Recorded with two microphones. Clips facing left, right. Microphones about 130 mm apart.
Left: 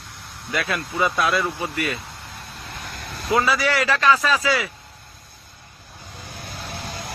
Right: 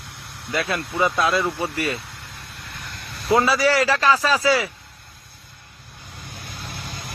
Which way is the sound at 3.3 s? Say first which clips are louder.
Right 3 dB; 30° right (ahead or behind).